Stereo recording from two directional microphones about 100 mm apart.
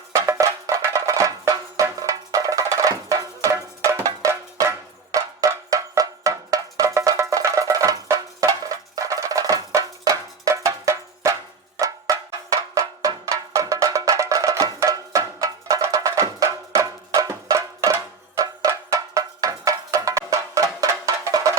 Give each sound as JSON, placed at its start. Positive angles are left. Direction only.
{"t": 0.1, "sound": "music", "side_deg": -30}